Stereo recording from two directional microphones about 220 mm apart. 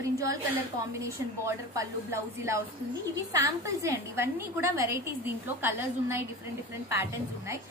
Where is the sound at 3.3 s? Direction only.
15° right (ahead or behind).